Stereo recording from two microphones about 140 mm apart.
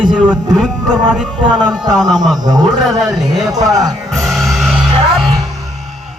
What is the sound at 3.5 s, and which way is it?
Speech, 25° right (ahead or behind).